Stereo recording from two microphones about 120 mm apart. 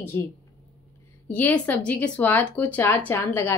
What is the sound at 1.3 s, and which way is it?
Speech, 15° left (ahead or behind).